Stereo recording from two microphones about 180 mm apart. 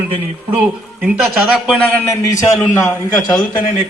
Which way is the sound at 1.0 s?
Centre (ahead or behind).